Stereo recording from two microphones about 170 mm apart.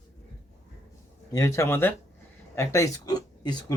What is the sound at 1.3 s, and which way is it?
Speech, 15° left (ahead or behind).